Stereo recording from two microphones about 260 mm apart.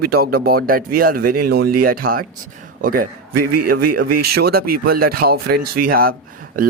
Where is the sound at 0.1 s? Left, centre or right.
Right.